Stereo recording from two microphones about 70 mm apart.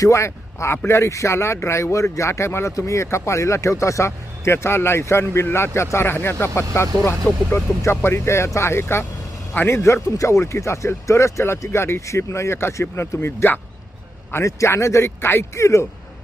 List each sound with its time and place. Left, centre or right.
0.0 s a man's voice: left